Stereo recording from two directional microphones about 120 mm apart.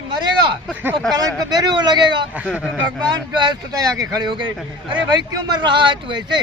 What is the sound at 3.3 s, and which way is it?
Speech, 40° right (ahead or behind).